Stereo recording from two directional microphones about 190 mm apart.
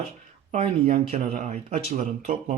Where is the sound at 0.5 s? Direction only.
35° right (ahead or behind).